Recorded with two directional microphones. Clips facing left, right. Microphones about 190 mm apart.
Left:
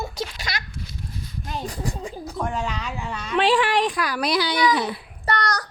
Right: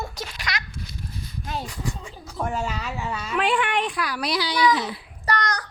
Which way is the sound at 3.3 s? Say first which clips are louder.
Left 4 dB; 30° left (ahead or behind).